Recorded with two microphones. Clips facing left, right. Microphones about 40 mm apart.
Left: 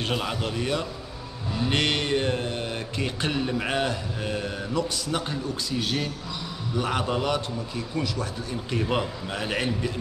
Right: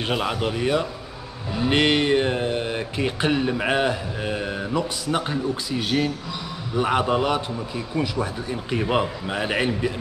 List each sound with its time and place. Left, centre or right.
0.0 s speech: centre